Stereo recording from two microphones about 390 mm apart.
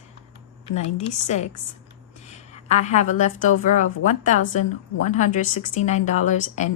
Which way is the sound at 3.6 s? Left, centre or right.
Centre.